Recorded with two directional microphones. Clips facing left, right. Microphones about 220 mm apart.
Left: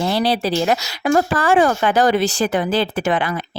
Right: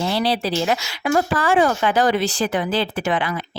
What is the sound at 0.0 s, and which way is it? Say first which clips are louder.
Speech: left 2 dB; 45° left (ahead or behind).